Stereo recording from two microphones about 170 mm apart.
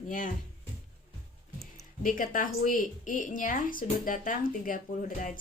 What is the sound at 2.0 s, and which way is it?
A woman's voice, 50° left (ahead or behind).